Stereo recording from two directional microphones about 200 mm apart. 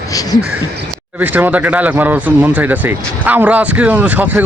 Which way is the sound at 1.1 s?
10° right (ahead or behind).